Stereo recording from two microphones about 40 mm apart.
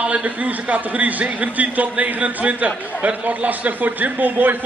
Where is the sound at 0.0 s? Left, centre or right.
Right.